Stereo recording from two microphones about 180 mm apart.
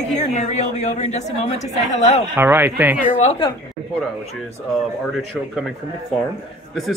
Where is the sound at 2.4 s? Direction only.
10° right (ahead or behind).